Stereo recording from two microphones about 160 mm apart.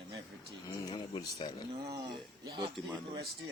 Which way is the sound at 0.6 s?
30° left (ahead or behind).